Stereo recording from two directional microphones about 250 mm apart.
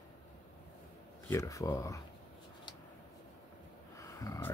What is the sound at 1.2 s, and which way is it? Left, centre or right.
Speech, centre.